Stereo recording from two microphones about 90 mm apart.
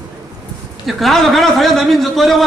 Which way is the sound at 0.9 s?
Centre (ahead or behind).